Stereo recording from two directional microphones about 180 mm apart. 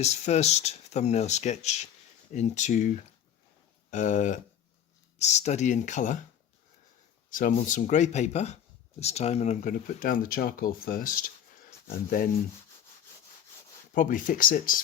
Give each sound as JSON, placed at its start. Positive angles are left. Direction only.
{"t": 0.0, "sound": "speech", "side_deg": 35}
{"t": 3.9, "sound": "speech", "side_deg": 45}
{"t": 7.3, "sound": "speech", "side_deg": 50}
{"t": 13.9, "sound": "speech", "side_deg": 45}